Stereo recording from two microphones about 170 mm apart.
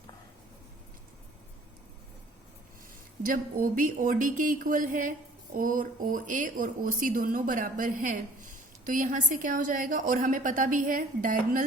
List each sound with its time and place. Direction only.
3.2 s speech: 55° right (ahead or behind)